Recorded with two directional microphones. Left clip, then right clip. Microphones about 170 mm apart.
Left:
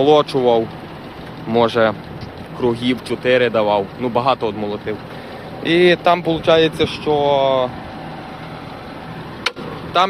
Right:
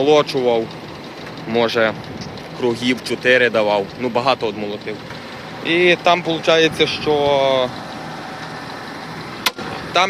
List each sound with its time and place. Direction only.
0.0 s speech: 20° left (ahead or behind)
5.6 s speech: 30° left (ahead or behind)
6.5 s speech: 5° left (ahead or behind)
10.0 s speech: 25° left (ahead or behind)